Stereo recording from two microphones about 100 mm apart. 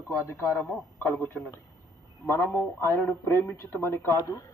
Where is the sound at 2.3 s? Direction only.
25° left (ahead or behind).